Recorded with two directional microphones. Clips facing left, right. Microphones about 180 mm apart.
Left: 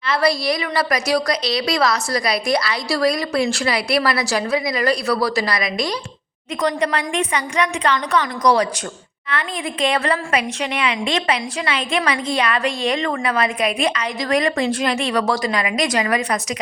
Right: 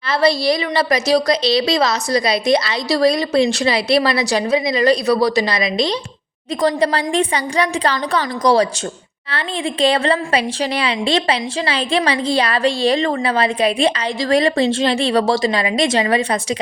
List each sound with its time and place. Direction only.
0.1 s a woman's voice: 25° right (ahead or behind)
9.8 s a woman's voice: 30° right (ahead or behind)